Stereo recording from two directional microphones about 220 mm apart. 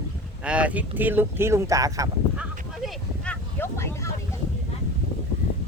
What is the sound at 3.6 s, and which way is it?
Vehicle, 10° left (ahead or behind).